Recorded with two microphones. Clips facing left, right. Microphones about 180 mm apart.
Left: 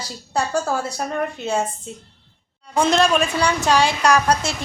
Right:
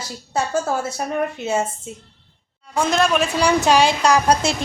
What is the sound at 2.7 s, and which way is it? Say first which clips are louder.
Speech: left 1 dB; centre (ahead or behind).